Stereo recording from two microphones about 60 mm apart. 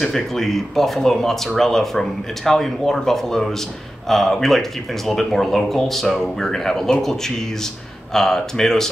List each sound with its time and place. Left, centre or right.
0.0 s speech: centre